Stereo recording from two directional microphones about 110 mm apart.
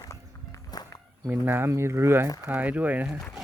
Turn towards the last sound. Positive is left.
turn(degrees=-15)  # may be behind; listen again after turning